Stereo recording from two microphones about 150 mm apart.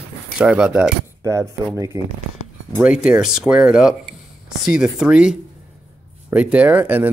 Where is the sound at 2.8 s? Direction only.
5° right (ahead or behind).